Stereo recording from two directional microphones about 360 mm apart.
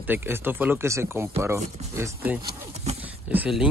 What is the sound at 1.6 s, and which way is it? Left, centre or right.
Speech, centre.